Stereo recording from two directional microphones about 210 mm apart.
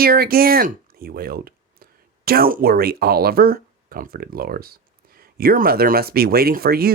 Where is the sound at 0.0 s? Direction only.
45° right (ahead or behind).